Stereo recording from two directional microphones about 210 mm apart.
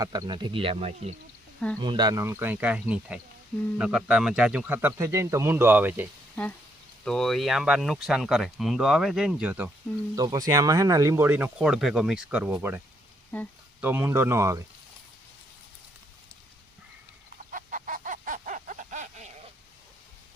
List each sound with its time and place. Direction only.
0.0 s speech: 20° right (ahead or behind)
7.0 s speech: centre (ahead or behind)
10.2 s speech: 15° right (ahead or behind)
13.3 s speech: 5° left (ahead or behind)
13.8 s speech: 10° right (ahead or behind)
17.5 s fowl: 40° right (ahead or behind)